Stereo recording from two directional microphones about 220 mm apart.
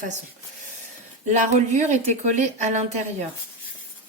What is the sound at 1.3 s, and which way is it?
Speech, 30° right (ahead or behind).